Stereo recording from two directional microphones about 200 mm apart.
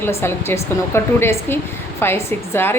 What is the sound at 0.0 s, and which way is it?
A woman's voice, 15° left (ahead or behind).